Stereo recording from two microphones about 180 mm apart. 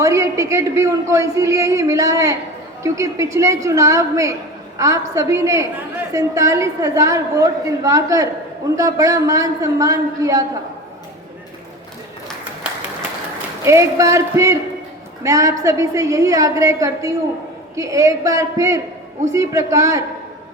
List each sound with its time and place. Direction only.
0.0 s a woman's voice: 15° right (ahead or behind)
13.7 s a woman's voice: 15° right (ahead or behind)